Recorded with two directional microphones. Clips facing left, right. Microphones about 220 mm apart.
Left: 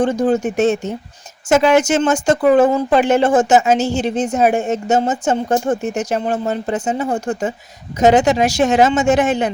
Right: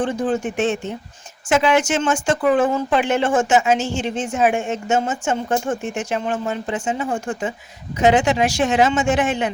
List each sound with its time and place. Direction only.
0.0 s speech: 40° left (ahead or behind)